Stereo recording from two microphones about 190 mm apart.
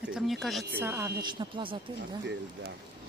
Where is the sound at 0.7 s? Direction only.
15° right (ahead or behind).